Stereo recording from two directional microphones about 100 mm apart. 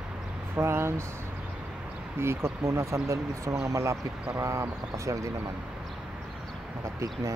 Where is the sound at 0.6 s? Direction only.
25° right (ahead or behind).